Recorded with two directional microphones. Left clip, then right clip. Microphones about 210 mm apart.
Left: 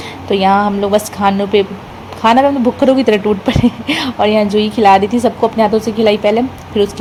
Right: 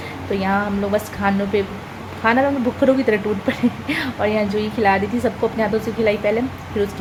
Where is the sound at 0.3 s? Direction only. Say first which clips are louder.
Left 10 dB; 30° left (ahead or behind).